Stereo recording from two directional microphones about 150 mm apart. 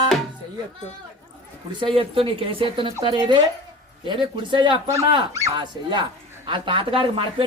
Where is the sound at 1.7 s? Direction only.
35° right (ahead or behind).